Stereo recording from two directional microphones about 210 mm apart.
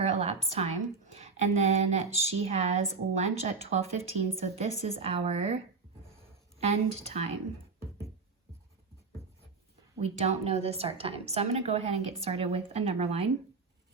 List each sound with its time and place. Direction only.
0.0 s a woman's voice: 30° right (ahead or behind)
6.6 s a woman's voice: 30° right (ahead or behind)
10.0 s a woman's voice: 30° right (ahead or behind)